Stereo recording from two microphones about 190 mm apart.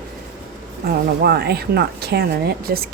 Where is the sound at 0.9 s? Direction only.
55° right (ahead or behind).